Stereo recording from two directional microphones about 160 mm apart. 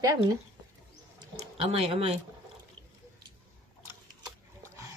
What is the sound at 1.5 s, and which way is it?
Speech, 40° right (ahead or behind).